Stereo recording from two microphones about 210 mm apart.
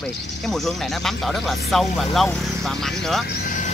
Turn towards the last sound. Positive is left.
turn(degrees=40)  # may be behind; listen again after turning